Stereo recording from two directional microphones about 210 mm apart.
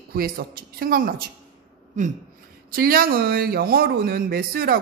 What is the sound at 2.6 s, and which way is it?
Speech, 45° right (ahead or behind).